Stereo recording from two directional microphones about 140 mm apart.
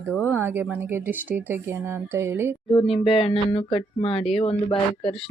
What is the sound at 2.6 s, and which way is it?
Speech, 40° left (ahead or behind).